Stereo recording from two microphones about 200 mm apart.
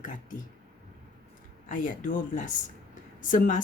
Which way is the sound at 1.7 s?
40° left (ahead or behind).